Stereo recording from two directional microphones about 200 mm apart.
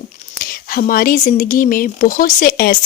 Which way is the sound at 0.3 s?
45° left (ahead or behind).